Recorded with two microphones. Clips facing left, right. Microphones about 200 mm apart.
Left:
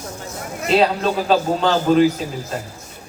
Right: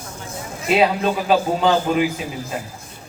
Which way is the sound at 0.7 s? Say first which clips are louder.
Left 1 dB; 5° right (ahead or behind).